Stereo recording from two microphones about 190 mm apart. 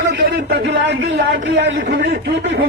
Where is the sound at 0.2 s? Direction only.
55° right (ahead or behind).